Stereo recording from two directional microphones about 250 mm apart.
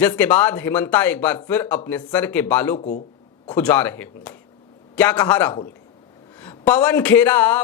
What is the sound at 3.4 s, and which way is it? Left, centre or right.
A man's voice, centre.